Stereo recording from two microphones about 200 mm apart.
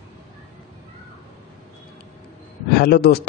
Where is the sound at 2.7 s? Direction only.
50° left (ahead or behind).